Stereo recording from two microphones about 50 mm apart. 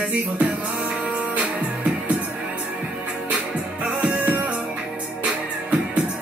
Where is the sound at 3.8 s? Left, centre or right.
Centre.